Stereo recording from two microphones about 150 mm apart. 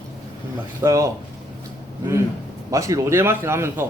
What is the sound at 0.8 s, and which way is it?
Speech, 20° right (ahead or behind).